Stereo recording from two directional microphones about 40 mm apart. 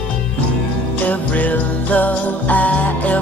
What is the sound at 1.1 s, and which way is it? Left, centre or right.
Jingle bell, left.